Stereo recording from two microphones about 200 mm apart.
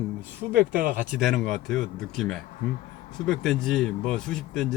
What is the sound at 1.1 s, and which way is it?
Speech, centre (ahead or behind).